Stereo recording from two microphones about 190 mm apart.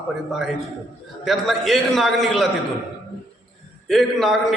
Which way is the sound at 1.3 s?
Centre (ahead or behind).